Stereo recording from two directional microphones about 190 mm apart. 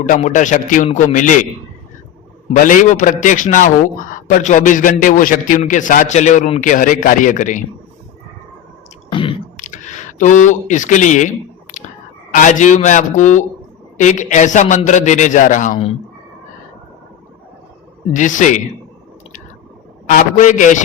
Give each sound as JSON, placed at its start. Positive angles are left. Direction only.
{"t": 0.0, "sound": "a man's voice", "side_deg": 40}
{"t": 2.5, "sound": "a man's voice", "side_deg": 40}
{"t": 9.1, "sound": "a sound", "side_deg": 30}
{"t": 9.6, "sound": "a sound", "side_deg": 40}
{"t": 12.3, "sound": "a man's voice", "side_deg": 40}
{"t": 18.1, "sound": "a man's voice", "side_deg": 40}
{"t": 20.1, "sound": "a man's voice", "side_deg": 40}